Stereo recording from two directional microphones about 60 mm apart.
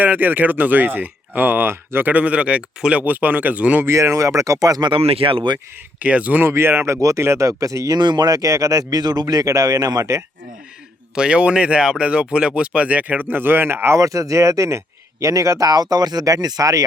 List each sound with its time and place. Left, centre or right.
0.0 s speech: right
2.0 s speech: right
3.1 s speech: right
3.8 s speech: right
6.0 s speech: right
6.4 s speech: right
11.1 s speech: centre; by 14.0 s right
14.0 s speech: right